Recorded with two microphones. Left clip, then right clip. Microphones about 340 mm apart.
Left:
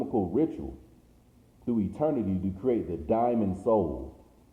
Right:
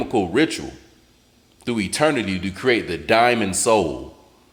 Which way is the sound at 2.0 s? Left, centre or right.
Right.